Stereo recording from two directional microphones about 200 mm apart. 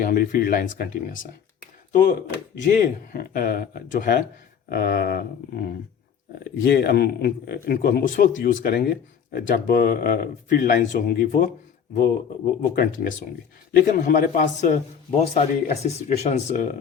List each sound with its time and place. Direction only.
0.0 s a man's voice: 45° left (ahead or behind)
6.7 s a man's voice: 50° left (ahead or behind)
12.7 s a man's voice: 45° left (ahead or behind)